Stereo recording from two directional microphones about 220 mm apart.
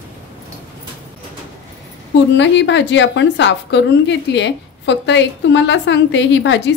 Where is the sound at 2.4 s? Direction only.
55° left (ahead or behind).